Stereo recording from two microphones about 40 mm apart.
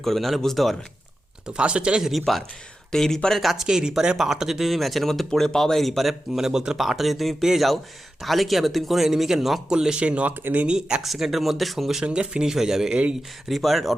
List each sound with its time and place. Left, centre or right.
0.0 s speech: centre
1.5 s speech: right
2.0 s speech: centre
2.9 s speech: centre
3.5 s speech: centre
6.4 s speech: centre
6.7 s speech: centre
9.6 s speech: centre
10.0 s speech: right
10.7 s speech: right
11.0 s speech: centre
12.0 s speech: right
12.9 s speech: right
13.5 s speech: centre